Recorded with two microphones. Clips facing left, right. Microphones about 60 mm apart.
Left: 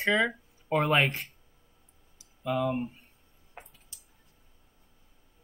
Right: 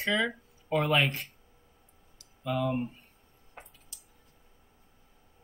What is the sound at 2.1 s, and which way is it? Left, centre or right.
Clicking, centre.